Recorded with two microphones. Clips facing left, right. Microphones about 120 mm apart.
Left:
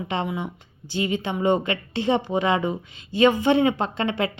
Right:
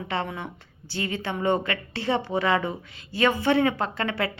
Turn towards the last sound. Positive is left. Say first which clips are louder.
# left 3 dB
turn(degrees=20)  # may be behind; listen again after turning